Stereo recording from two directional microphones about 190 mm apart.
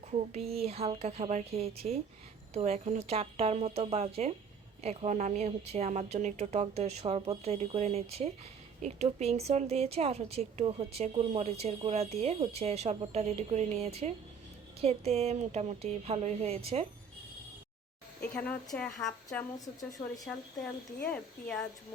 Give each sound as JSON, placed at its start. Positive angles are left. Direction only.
{"t": 0.1, "sound": "speech", "side_deg": -35}
{"t": 18.2, "sound": "speech", "side_deg": 5}
{"t": 21.1, "sound": "speech", "side_deg": 5}